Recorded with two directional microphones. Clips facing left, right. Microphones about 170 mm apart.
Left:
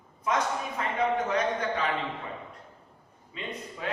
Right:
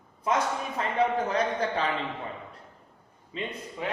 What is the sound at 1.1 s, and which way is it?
Speech, 30° right (ahead or behind).